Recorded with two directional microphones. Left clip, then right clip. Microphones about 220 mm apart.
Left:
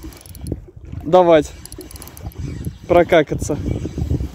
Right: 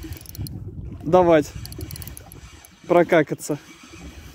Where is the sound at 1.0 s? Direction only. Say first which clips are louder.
Left 4 dB; 10° right (ahead or behind).